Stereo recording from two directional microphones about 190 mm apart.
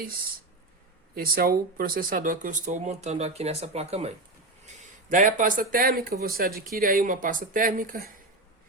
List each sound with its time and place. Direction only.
1.1 s speech: 50° right (ahead or behind)